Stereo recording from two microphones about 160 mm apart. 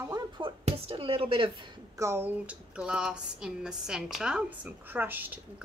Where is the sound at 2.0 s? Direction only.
15° right (ahead or behind).